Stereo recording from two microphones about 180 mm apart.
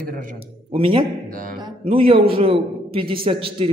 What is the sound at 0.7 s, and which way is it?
A man's voice, 30° right (ahead or behind).